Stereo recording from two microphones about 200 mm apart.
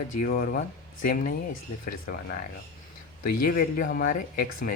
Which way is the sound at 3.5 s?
45° left (ahead or behind).